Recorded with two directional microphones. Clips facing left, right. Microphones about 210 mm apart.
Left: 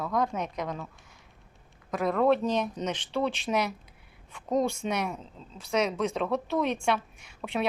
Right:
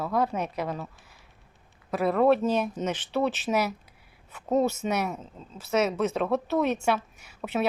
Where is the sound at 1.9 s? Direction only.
5° right (ahead or behind).